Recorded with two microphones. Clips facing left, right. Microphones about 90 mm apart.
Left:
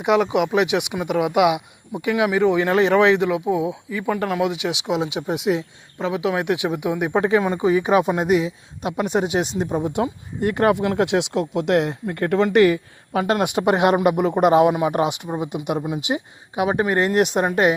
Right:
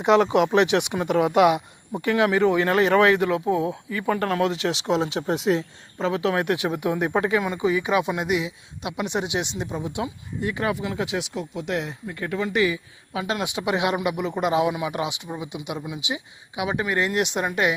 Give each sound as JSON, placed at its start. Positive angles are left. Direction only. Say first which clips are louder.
{"t": 0.0, "sound": "speech", "louder": "even", "side_deg": 5}
{"t": 7.2, "sound": "speech", "louder": "left 7 dB", "side_deg": 30}